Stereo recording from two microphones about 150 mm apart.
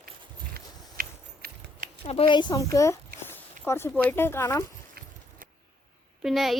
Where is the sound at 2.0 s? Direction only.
40° left (ahead or behind); by 4.6 s 15° left (ahead or behind).